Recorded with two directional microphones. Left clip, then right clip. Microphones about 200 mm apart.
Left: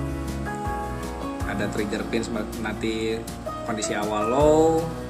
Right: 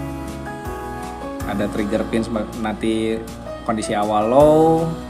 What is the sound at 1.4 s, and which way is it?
Speech, 35° right (ahead or behind).